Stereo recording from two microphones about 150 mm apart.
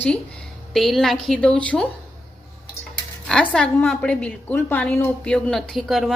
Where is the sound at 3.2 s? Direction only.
5° left (ahead or behind).